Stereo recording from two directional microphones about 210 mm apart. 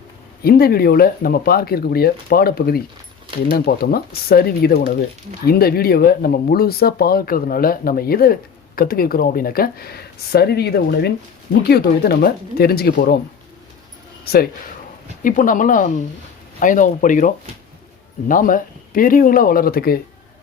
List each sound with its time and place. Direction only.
0.4 s speech: 45° left (ahead or behind)
15.2 s speech: 40° left (ahead or behind)